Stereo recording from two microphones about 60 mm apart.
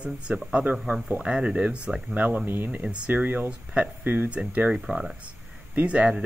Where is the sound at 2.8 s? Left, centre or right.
Right.